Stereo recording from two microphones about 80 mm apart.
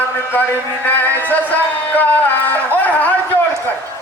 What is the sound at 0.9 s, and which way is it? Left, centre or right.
Music, left.